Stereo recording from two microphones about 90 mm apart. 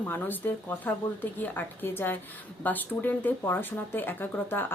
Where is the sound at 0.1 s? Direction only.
20° left (ahead or behind).